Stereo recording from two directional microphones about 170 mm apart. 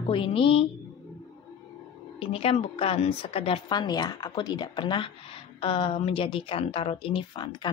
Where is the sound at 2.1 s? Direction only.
35° left (ahead or behind).